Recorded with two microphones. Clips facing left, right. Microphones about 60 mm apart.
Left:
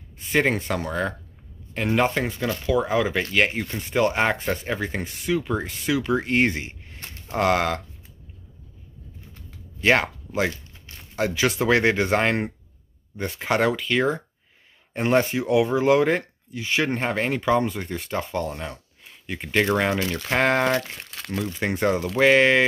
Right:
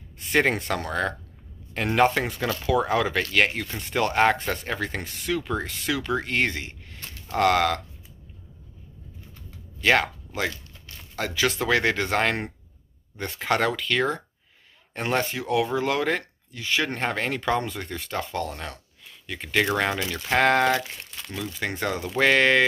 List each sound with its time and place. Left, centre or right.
0.3 s speech: centre
9.8 s speech: left
19.8 s speech: centre
21.0 s crumpling: left
21.5 s speech: centre